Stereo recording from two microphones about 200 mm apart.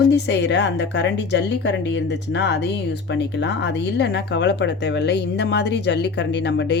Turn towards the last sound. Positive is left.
turn(degrees=60)  # may be behind; listen again after turning